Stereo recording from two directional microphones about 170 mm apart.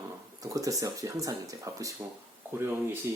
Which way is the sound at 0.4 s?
20° right (ahead or behind).